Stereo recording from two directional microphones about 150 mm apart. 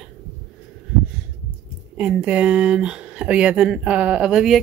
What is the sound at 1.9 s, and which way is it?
Speech, 10° right (ahead or behind).